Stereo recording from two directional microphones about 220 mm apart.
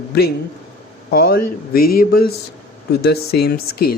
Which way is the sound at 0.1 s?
45° left (ahead or behind).